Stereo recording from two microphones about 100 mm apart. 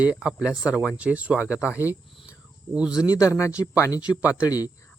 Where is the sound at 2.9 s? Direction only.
40° left (ahead or behind).